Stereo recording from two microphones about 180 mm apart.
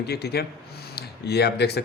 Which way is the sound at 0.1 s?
65° left (ahead or behind).